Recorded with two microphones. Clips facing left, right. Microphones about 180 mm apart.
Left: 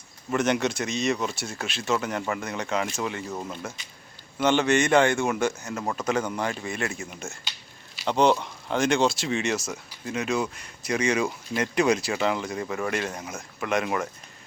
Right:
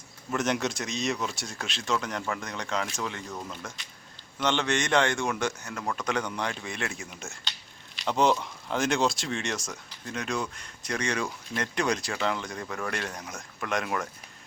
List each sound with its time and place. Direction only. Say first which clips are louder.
0.3 s speech: left 4 dB; centre (ahead or behind)
5.7 s speech: left 3 dB; 25° left (ahead or behind)
6.0 s speech: left 4 dB; 5° left (ahead or behind)